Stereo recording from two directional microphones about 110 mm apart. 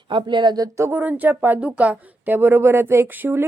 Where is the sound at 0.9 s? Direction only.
15° right (ahead or behind).